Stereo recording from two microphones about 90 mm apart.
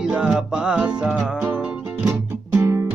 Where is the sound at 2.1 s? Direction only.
30° right (ahead or behind).